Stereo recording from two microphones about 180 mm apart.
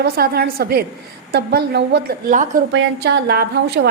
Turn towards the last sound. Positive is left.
turn(degrees=-65)  # may be behind; listen again after turning